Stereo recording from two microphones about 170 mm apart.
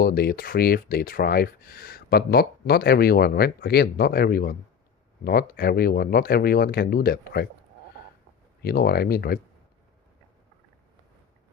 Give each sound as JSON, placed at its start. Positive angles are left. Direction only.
{"t": 0.0, "sound": "speech", "side_deg": 65}
{"t": 8.6, "sound": "speech", "side_deg": 65}